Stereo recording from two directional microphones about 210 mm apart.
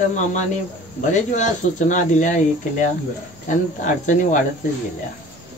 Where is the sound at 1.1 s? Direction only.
35° left (ahead or behind).